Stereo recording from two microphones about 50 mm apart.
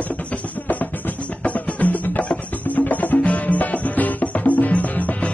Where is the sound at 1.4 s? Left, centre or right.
Left.